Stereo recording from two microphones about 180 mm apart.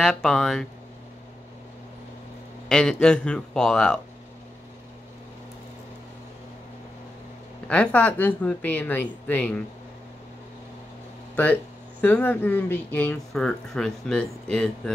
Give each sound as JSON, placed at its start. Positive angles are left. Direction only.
{"t": 0.0, "sound": "speech", "side_deg": 5}
{"t": 2.7, "sound": "speech", "side_deg": 5}
{"t": 7.6, "sound": "speech", "side_deg": 5}
{"t": 12.0, "sound": "speech", "side_deg": 10}